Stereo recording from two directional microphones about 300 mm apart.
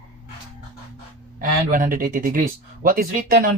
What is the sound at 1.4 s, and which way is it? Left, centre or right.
Speech, right.